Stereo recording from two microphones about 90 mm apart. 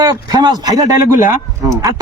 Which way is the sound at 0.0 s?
45° right (ahead or behind).